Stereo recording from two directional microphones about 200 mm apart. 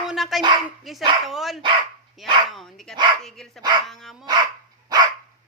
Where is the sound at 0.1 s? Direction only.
Centre (ahead or behind).